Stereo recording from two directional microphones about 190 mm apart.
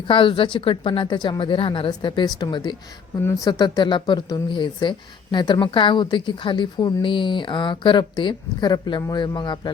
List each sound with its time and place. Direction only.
0.1 s a woman's voice: 25° left (ahead or behind)